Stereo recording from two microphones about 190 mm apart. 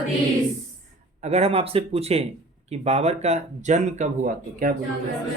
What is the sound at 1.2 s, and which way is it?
Speech, 35° right (ahead or behind).